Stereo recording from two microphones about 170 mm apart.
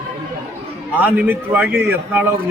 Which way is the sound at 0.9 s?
10° right (ahead or behind).